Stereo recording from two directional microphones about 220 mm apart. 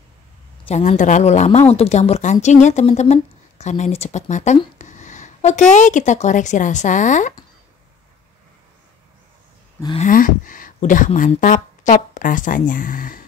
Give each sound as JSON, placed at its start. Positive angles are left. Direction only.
{"t": 0.7, "sound": "speech", "side_deg": 30}
{"t": 9.9, "sound": "speech", "side_deg": 35}